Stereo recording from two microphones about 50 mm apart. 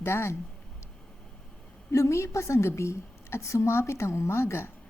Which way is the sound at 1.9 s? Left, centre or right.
Left.